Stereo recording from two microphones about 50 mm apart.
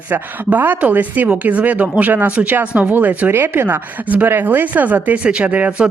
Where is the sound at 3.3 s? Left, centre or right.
Right.